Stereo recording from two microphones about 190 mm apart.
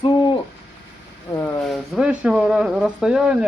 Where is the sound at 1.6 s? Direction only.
Centre (ahead or behind).